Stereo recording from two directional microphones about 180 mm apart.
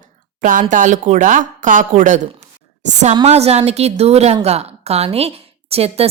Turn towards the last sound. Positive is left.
turn(degrees=-35)  # may be behind; listen again after turning